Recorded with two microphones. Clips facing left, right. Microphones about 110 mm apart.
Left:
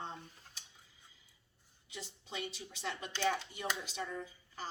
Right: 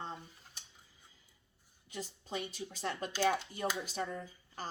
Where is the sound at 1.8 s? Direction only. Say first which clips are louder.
Right 5 dB; 45° right (ahead or behind).